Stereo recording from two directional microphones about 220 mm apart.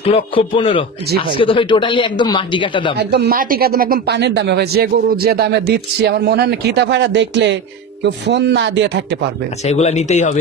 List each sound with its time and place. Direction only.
0.0 s speech: 25° left (ahead or behind)
3.0 s speech: 50° right (ahead or behind)
9.7 s speech: 30° left (ahead or behind)